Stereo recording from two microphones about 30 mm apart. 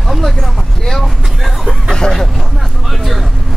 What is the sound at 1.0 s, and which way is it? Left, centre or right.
Vehicle, centre.